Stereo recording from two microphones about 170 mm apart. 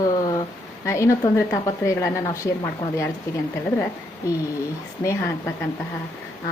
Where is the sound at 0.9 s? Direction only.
15° left (ahead or behind).